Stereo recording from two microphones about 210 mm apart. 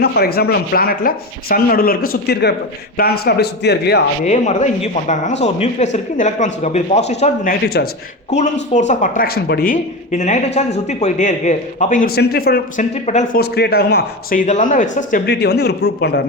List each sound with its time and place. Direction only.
0.0 s speech: 50° left (ahead or behind)
4.3 s speech: 35° left (ahead or behind)
8.7 s speech: 35° left (ahead or behind)
13.1 s speech: 35° left (ahead or behind)
13.4 s speech: 50° left (ahead or behind)
15.3 s speech: 50° left (ahead or behind)